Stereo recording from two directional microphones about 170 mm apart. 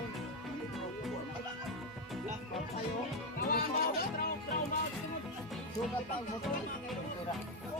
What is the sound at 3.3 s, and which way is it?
Music, 60° left (ahead or behind).